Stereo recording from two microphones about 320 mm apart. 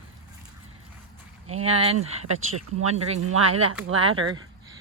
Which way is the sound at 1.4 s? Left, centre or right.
Right.